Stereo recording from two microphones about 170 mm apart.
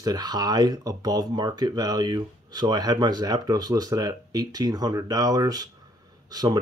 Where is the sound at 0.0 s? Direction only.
25° right (ahead or behind).